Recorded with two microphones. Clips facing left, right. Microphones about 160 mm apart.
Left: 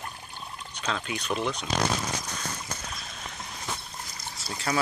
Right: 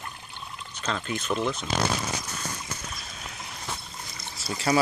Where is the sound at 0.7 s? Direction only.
Centre (ahead or behind).